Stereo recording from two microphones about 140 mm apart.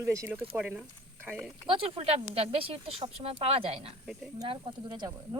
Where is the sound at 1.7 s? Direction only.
40° right (ahead or behind).